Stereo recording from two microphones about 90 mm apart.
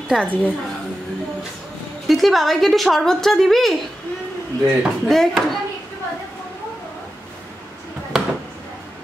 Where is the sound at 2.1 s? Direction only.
Centre (ahead or behind).